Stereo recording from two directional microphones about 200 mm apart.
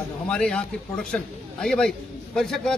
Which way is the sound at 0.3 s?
5° left (ahead or behind).